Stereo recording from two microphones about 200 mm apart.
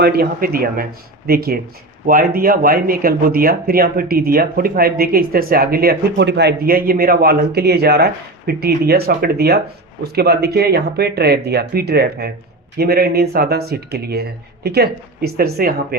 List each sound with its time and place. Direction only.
0.0 s speech: 50° right (ahead or behind)